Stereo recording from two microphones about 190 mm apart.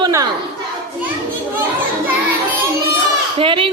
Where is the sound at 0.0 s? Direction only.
20° right (ahead or behind).